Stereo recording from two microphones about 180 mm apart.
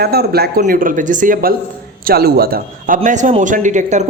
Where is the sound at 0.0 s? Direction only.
60° right (ahead or behind).